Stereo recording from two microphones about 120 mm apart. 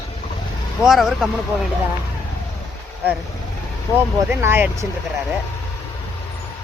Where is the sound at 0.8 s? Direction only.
Centre (ahead or behind).